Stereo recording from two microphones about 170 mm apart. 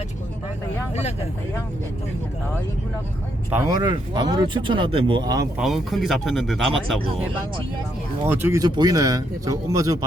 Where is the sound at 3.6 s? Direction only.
25° right (ahead or behind).